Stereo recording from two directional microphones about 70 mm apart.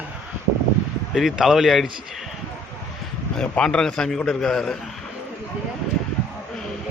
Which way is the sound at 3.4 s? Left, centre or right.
Centre.